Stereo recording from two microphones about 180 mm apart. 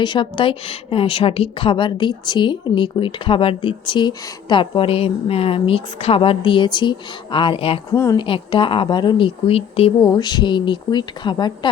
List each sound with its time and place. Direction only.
0.0 s a woman's voice: 25° left (ahead or behind)
7.9 s speech: 15° left (ahead or behind)
8.2 s a woman's voice: 30° left (ahead or behind)
10.0 s a woman's voice: 20° left (ahead or behind)